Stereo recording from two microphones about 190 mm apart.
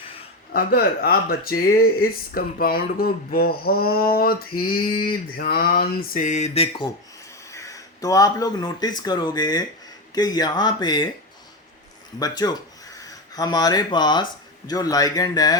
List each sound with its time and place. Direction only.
0.5 s speech: 55° left (ahead or behind); by 6.9 s 30° left (ahead or behind)
7.5 s speech: 15° left (ahead or behind)
12.2 s speech: 20° left (ahead or behind)